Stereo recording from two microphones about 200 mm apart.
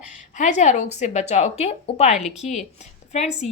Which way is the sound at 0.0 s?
35° left (ahead or behind).